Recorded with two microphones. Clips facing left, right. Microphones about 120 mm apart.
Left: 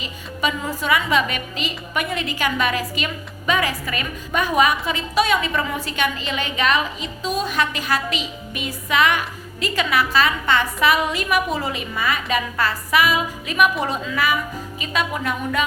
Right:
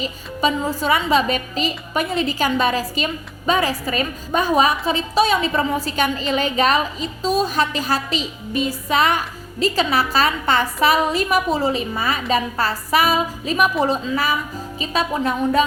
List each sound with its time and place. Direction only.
0.0 s a woman's voice: 35° right (ahead or behind)